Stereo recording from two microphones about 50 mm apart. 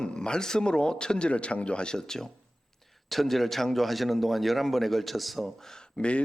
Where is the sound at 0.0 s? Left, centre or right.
Centre.